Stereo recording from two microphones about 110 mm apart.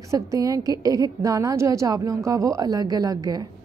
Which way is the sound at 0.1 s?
30° right (ahead or behind).